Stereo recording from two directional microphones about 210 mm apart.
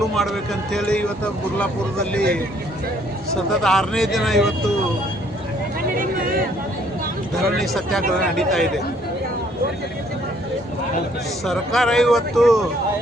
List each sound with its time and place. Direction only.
0.2 s speech: centre (ahead or behind)
3.5 s speech: centre (ahead or behind)
6.0 s a sound: 40° right (ahead or behind)
7.5 s speech: centre (ahead or behind)
11.4 s speech: centre (ahead or behind)